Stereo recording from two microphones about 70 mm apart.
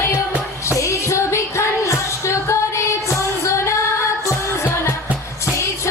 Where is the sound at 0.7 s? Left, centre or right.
Left.